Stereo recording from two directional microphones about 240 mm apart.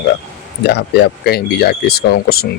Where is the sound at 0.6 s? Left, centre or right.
Left.